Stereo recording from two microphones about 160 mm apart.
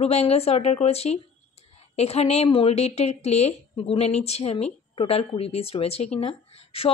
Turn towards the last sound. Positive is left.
turn(degrees=35)  # may be behind; listen again after turning